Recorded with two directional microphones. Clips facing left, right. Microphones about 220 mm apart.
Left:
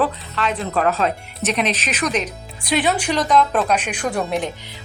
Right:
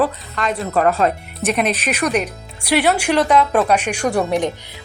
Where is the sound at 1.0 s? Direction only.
55° right (ahead or behind).